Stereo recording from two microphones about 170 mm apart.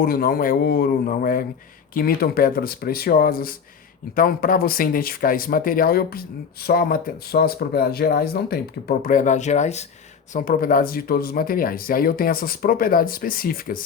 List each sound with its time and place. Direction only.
0.0 s speech: 60° left (ahead or behind); by 9.8 s 45° left (ahead or behind)
10.3 s speech: 55° left (ahead or behind)